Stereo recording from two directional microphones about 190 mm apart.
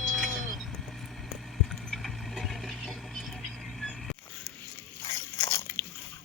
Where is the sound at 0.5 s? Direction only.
Centre (ahead or behind).